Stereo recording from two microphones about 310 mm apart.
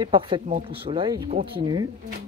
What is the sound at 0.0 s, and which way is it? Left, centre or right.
Speech, centre.